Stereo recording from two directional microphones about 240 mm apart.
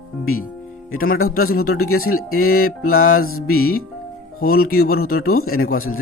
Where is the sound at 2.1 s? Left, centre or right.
Left.